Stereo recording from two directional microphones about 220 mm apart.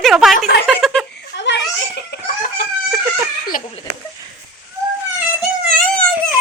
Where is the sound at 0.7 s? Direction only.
Centre (ahead or behind).